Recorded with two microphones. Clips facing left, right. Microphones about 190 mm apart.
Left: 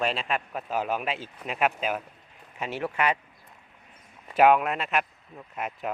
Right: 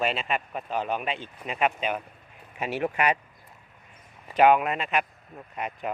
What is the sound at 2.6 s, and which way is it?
Speech, 15° right (ahead or behind).